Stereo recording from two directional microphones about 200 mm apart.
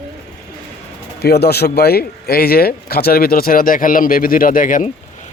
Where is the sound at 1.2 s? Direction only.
55° left (ahead or behind).